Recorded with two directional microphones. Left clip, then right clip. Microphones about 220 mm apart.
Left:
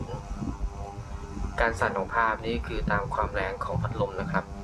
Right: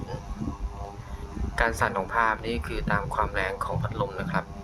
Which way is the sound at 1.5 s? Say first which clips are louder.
Right 1 dB; 30° right (ahead or behind).